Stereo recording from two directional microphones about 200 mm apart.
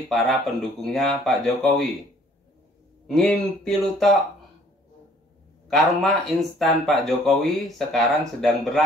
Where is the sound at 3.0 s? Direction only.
Centre (ahead or behind).